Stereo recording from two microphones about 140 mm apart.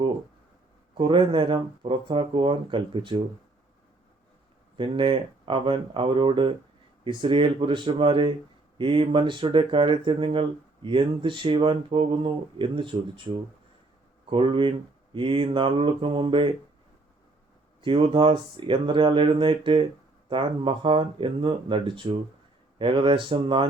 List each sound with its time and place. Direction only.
0.9 s speech: 35° right (ahead or behind)
4.8 s speech: 35° right (ahead or behind)
14.3 s speech: 35° right (ahead or behind)
17.8 s speech: 35° right (ahead or behind)